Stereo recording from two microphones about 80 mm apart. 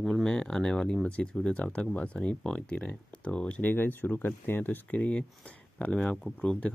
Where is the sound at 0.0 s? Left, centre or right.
Centre.